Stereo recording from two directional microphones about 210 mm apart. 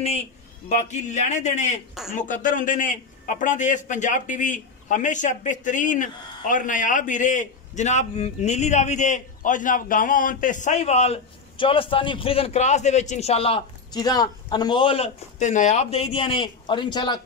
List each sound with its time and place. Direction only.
0.7 s a man's voice: 35° left (ahead or behind)